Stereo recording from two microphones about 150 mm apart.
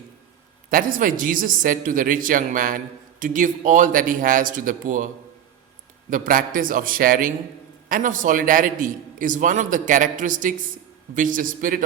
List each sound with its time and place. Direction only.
0.7 s a man's voice: 65° right (ahead or behind)
6.1 s a man's voice: 65° right (ahead or behind)